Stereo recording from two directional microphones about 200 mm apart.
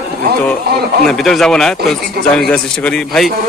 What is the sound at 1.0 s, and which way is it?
A man's voice, centre (ahead or behind).